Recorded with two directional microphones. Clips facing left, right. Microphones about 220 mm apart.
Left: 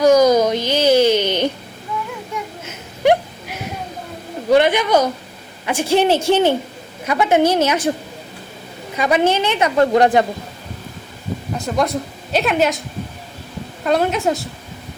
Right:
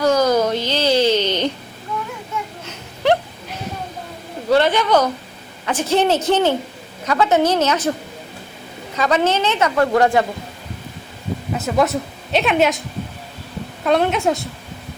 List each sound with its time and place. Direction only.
0.0 s a sound: 15° left (ahead or behind)
2.6 s a sound: 15° left (ahead or behind)
4.4 s a woman's voice: 15° left (ahead or behind)
9.0 s a woman's voice: 15° left (ahead or behind)
9.7 s speech: 25° left (ahead or behind)
11.5 s a woman's voice: 5° right (ahead or behind)
13.8 s a woman's voice: centre (ahead or behind)